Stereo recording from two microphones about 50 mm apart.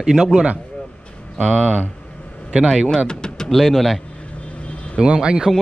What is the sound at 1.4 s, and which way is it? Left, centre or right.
Speech, centre.